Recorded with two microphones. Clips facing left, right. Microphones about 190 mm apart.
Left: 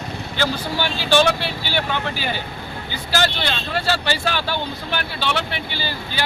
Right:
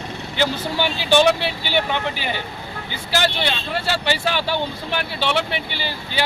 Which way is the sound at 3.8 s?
20° right (ahead or behind).